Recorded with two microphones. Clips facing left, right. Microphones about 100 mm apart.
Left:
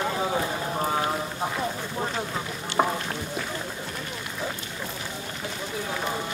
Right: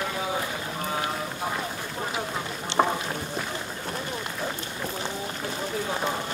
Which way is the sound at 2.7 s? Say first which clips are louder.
Right 1 dB; 25° right (ahead or behind).